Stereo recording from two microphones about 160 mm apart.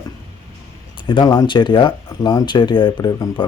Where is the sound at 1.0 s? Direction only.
30° left (ahead or behind).